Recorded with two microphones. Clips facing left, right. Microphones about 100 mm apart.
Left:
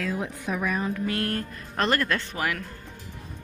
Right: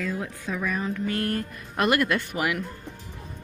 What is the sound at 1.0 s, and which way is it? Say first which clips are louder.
Speech: right 1 dB; 5° right (ahead or behind).